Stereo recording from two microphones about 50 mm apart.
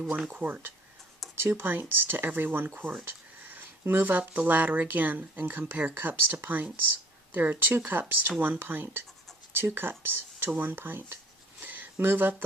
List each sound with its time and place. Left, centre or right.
0.3 s speech: right
1.4 s speech: right
5.7 s speech: right
10.5 s speech: right
11.6 s a sound: right